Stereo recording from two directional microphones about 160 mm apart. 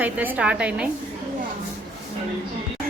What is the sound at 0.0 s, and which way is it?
Speech, 10° right (ahead or behind).